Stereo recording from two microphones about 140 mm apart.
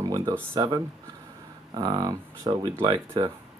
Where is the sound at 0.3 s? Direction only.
35° right (ahead or behind).